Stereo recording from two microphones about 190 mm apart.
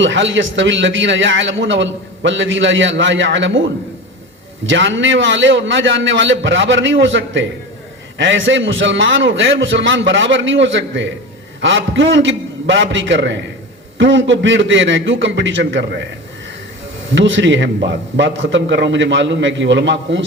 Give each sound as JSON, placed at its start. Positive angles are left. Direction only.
{"t": 0.0, "sound": "a man's voice", "side_deg": -75}
{"t": 4.6, "sound": "a man's voice", "side_deg": -75}
{"t": 17.1, "sound": "a man's voice", "side_deg": -80}